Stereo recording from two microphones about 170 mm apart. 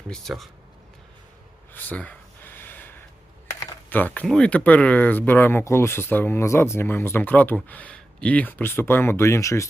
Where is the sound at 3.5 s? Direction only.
10° left (ahead or behind).